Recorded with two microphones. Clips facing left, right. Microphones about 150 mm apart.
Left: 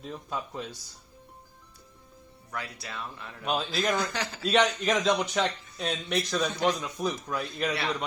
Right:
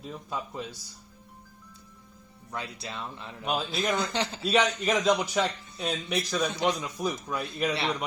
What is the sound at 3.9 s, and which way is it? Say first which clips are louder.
Speech: right 1 dB; 25° right (ahead or behind).